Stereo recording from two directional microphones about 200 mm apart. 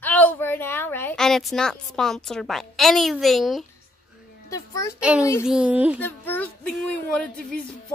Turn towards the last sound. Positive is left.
turn(degrees=5)  # may be behind; listen again after turning